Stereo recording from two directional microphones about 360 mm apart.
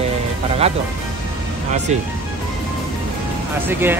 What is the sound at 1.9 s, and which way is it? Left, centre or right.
Speech, centre.